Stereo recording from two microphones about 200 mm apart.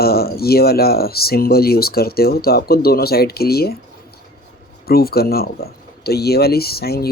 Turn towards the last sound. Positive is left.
turn(degrees=50)  # may be behind; listen again after turning